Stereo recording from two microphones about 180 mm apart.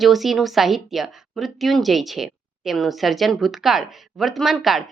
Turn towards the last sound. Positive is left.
turn(degrees=0)  # may be behind; listen again after turning